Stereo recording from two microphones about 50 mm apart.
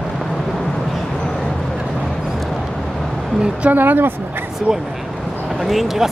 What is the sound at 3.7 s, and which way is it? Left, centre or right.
Speech, right.